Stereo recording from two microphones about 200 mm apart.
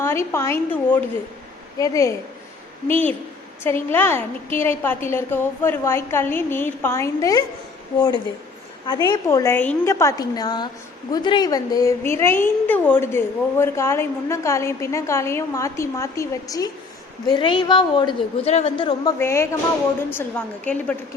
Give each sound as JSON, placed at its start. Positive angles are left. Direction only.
{"t": 0.0, "sound": "a woman's voice", "side_deg": 15}
{"t": 3.8, "sound": "a woman's voice", "side_deg": 10}
{"t": 19.2, "sound": "a woman's voice", "side_deg": 15}